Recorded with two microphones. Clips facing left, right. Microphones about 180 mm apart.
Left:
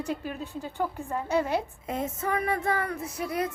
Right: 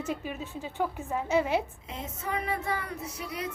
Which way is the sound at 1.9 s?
50° left (ahead or behind).